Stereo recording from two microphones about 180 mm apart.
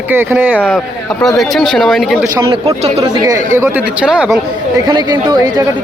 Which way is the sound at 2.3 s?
20° right (ahead or behind).